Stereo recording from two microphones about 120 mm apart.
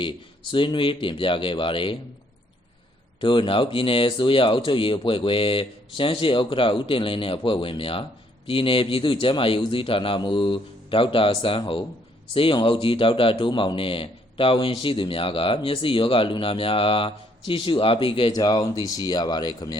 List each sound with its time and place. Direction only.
0.0 s a man's voice: 45° left (ahead or behind)
3.2 s a man's voice: 45° left (ahead or behind)
18.3 s speech: 35° left (ahead or behind)